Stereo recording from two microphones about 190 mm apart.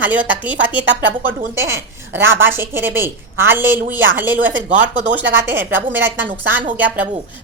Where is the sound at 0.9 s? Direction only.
75° right (ahead or behind).